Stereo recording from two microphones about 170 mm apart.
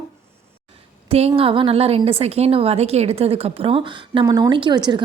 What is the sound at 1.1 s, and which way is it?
A woman's voice, 35° right (ahead or behind).